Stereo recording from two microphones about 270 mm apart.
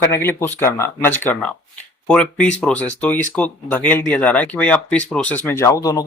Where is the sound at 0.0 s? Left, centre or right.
Centre.